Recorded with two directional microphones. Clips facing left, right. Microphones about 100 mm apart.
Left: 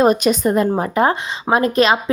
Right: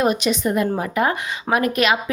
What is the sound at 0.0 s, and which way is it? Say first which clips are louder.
A woman's voice: left 5 dB; 40° left (ahead or behind).